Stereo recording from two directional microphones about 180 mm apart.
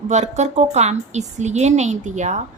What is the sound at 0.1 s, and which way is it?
A woman's voice, 40° right (ahead or behind).